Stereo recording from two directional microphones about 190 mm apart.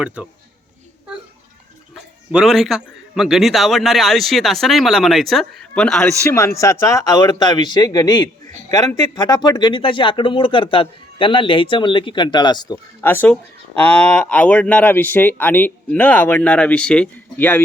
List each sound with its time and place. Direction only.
0.2 s speech: 5° right (ahead or behind)
2.3 s a man's voice: centre (ahead or behind)
6.2 s speech: 15° left (ahead or behind)